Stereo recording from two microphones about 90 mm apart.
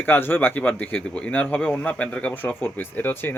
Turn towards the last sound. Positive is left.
turn(degrees=25)  # may be behind; listen again after turning